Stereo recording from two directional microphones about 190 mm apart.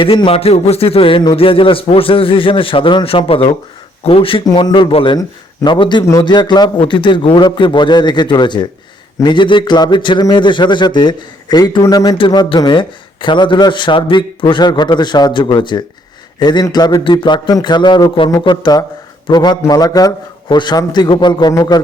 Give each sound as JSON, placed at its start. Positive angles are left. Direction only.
{"t": 0.0, "sound": "a man's voice", "side_deg": 25}